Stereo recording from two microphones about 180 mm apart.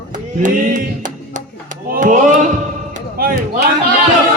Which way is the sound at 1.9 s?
45° right (ahead or behind).